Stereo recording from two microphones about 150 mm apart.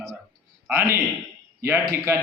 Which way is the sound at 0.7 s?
15° right (ahead or behind).